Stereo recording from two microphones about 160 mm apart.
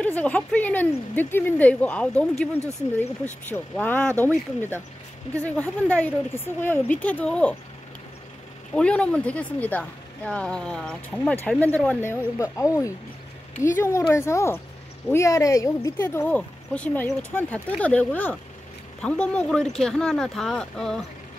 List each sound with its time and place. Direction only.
0.0 s speech: 10° left (ahead or behind)
3.5 s speech: 10° left (ahead or behind)
8.7 s speech: 5° left (ahead or behind)